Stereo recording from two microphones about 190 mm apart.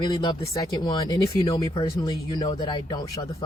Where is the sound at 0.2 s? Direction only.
20° left (ahead or behind).